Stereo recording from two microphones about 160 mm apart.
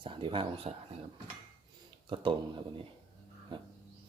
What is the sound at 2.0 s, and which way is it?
Speech, 30° right (ahead or behind).